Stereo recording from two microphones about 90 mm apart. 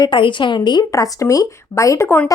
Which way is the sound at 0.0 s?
65° left (ahead or behind).